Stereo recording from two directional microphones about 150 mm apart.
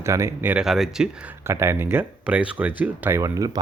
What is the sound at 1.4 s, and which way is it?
Speech, 15° right (ahead or behind).